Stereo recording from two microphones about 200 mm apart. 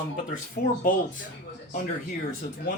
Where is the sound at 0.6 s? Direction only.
50° left (ahead or behind).